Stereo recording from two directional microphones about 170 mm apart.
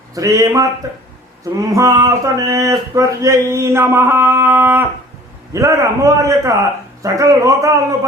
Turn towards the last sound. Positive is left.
turn(degrees=-20)  # may be behind; listen again after turning